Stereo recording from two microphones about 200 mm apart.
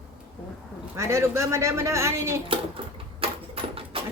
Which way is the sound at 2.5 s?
25° right (ahead or behind).